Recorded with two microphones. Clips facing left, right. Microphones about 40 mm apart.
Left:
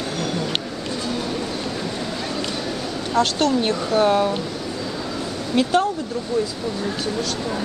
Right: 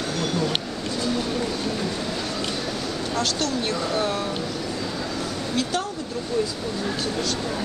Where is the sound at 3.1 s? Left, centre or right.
Left.